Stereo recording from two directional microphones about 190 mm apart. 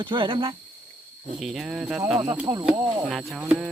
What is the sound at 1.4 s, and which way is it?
Speech, centre (ahead or behind).